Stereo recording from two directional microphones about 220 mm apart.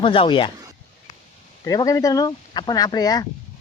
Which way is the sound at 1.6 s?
15° left (ahead or behind).